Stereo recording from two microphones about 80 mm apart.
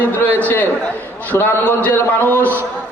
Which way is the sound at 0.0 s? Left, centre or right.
Left.